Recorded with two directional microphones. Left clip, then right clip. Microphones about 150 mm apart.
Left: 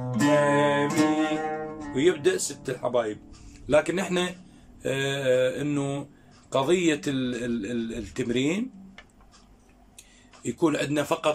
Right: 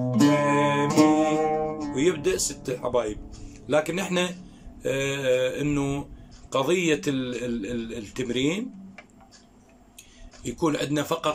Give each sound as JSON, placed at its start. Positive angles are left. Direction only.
{"t": 0.0, "sound": "music", "side_deg": -20}
{"t": 0.4, "sound": "music", "side_deg": -5}
{"t": 0.8, "sound": "music", "side_deg": -25}
{"t": 2.0, "sound": "speech", "side_deg": -5}
{"t": 10.4, "sound": "speech", "side_deg": 0}